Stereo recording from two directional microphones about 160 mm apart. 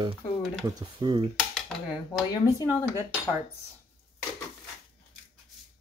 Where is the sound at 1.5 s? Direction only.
Centre (ahead or behind).